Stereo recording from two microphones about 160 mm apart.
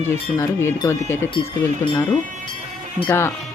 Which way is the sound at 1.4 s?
30° left (ahead or behind).